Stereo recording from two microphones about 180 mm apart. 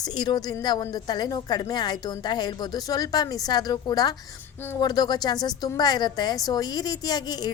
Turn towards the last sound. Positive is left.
turn(degrees=25)  # may be behind; listen again after turning